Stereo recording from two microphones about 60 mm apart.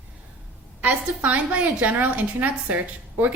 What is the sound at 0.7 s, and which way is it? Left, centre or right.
A woman's voice, right.